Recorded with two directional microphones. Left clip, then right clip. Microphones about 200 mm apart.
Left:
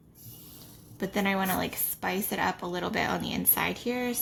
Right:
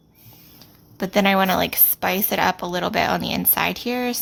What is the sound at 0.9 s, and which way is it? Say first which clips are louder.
A woman's voice: right 11 dB; 40° right (ahead or behind).